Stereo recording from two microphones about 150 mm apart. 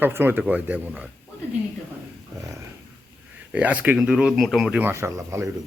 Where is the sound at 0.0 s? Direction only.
15° right (ahead or behind).